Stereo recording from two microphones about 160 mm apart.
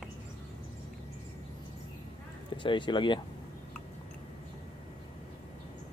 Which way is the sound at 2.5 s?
30° left (ahead or behind).